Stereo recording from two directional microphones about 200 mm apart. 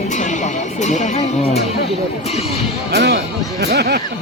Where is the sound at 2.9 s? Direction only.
55° right (ahead or behind).